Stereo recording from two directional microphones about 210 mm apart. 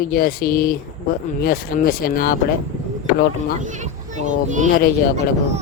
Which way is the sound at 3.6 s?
35° right (ahead or behind).